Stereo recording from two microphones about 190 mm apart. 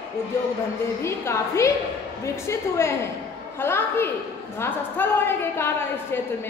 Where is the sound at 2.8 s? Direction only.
15° left (ahead or behind).